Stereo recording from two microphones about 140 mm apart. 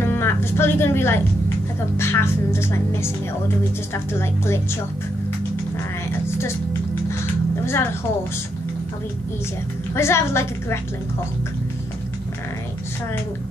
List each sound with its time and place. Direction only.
0.0 s music: 15° left (ahead or behind)
2.0 s a woman's voice: 20° left (ahead or behind)
6.2 s music: 20° left (ahead or behind)
7.6 s a woman's voice: 15° left (ahead or behind)
9.9 s a woman's voice: 20° left (ahead or behind)